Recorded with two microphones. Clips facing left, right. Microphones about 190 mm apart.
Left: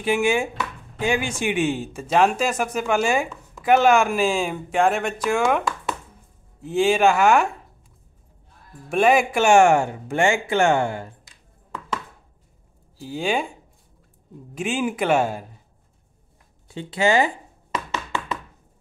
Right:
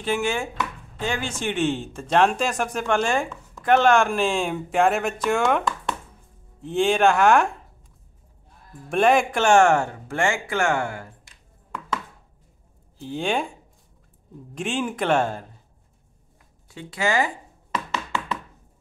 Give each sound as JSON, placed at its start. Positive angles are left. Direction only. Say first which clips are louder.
{"t": 0.0, "sound": "chopping", "louder": "left 4 dB", "side_deg": 10}
{"t": 8.8, "sound": "speech", "louder": "left 1 dB", "side_deg": 5}
{"t": 12.9, "sound": "chopping", "louder": "left 1 dB", "side_deg": 5}
{"t": 14.5, "sound": "speech", "louder": "left 2 dB", "side_deg": 5}
{"t": 16.6, "sound": "speech", "louder": "left 5 dB", "side_deg": 25}